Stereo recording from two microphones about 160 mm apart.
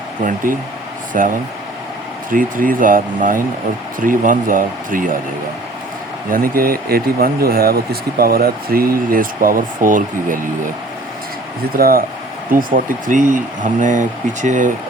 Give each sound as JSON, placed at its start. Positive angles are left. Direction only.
{"t": 0.2, "sound": "speech", "side_deg": -55}
{"t": 6.3, "sound": "speech", "side_deg": -65}
{"t": 11.8, "sound": "speech", "side_deg": -70}